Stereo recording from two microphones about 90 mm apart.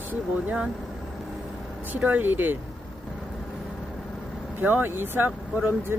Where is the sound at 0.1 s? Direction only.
15° right (ahead or behind).